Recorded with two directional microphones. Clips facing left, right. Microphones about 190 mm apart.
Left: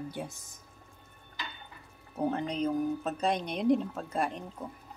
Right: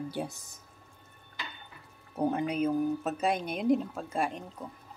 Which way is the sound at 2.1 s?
10° right (ahead or behind).